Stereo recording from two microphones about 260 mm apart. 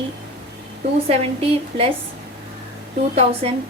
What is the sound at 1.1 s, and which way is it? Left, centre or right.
Speech, right.